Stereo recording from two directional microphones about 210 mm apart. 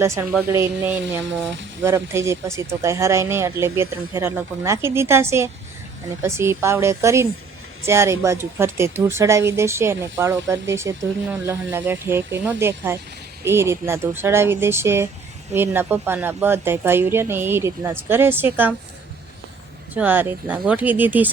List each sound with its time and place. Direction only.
0.0 s speech: 10° right (ahead or behind)
1.2 s a sound: 60° right (ahead or behind)
1.8 s speech: 10° right (ahead or behind)
20.0 s speech: 10° right (ahead or behind)